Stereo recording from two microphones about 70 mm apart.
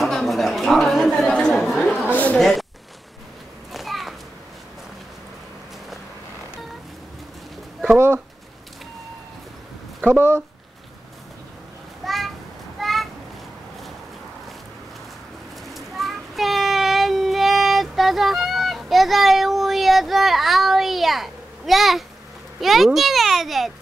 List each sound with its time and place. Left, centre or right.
0.0 s a child's voice: centre
3.7 s a sound: centre
10.1 s speech: right
12.0 s a sound: centre
15.7 s child singing: centre
22.6 s a child's voice: centre